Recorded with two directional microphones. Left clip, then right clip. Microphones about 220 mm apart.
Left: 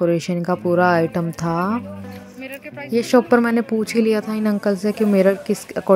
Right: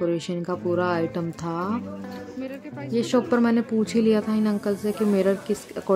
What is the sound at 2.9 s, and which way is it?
Speech, 25° left (ahead or behind).